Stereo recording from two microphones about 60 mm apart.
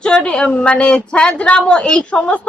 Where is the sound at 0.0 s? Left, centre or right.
Centre.